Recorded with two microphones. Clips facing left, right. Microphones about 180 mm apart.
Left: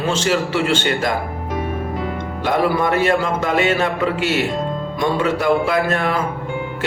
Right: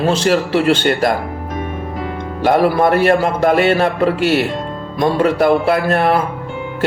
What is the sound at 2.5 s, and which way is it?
Speech, 45° right (ahead or behind).